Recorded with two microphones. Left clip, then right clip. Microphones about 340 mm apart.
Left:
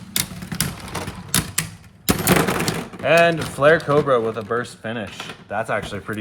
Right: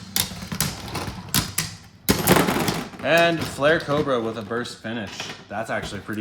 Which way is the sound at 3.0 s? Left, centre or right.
Left.